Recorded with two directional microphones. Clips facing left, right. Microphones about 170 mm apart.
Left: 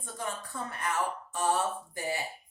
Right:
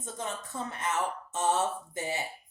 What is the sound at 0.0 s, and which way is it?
Speech, 20° right (ahead or behind).